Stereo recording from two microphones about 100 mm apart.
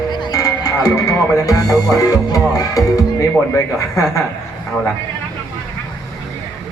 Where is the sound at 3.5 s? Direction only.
30° left (ahead or behind).